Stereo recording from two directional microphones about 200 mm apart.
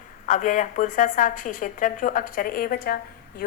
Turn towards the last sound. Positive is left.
turn(degrees=45)  # may be behind; listen again after turning